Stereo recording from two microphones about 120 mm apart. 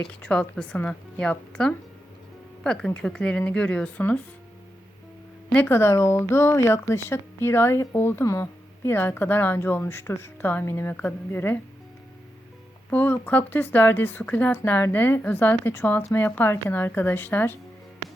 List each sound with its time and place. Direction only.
0.1 s speech: 10° left (ahead or behind)
5.5 s speech: 20° left (ahead or behind)
12.9 s speech: 15° left (ahead or behind)